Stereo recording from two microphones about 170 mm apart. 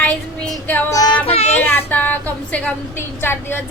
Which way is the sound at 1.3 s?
40° left (ahead or behind).